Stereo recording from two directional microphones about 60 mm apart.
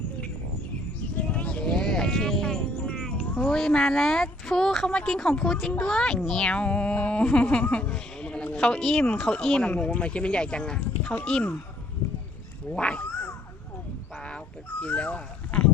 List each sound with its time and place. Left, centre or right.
1.1 s a sound: centre
1.7 s music: centre
2.7 s music: left
3.2 s cat: centre
3.6 s a woman's voice: centre
6.4 s a sound: centre
8.8 s a woman's voice: centre
9.6 s a sound: left
10.8 s speech: left
11.3 s a sound: centre
12.7 s cat: centre
14.2 s speech: centre